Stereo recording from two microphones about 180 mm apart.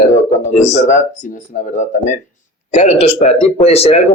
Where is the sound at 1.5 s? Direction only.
45° left (ahead or behind).